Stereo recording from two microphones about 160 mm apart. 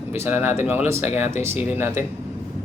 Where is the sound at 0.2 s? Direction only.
15° right (ahead or behind).